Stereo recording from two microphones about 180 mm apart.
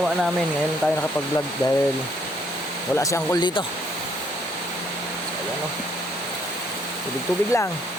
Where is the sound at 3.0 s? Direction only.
20° left (ahead or behind).